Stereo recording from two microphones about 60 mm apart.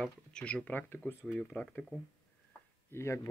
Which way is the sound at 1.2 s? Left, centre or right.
Centre.